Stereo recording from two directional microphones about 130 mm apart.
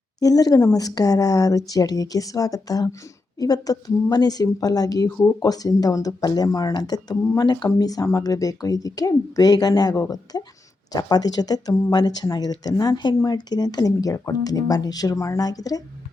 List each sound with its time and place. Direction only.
0.2 s speech: 30° left (ahead or behind)